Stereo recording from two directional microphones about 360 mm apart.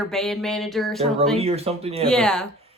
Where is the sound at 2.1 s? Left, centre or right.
Centre.